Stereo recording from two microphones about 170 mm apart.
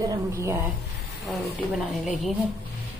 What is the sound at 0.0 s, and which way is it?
Speech, 20° right (ahead or behind).